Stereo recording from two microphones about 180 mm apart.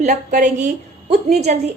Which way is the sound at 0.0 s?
45° right (ahead or behind).